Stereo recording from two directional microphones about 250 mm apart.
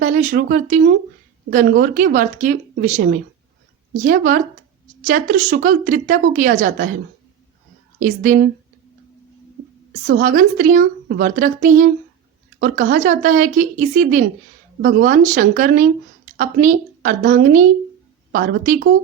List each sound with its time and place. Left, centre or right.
0.0 s a woman's voice: right
7.9 s a woman's voice: right
10.1 s a woman's voice: right